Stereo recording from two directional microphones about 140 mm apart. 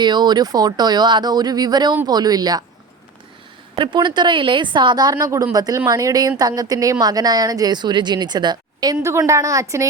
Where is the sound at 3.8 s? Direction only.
30° right (ahead or behind).